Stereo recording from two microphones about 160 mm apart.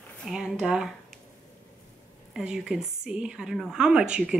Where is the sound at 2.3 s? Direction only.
5° right (ahead or behind).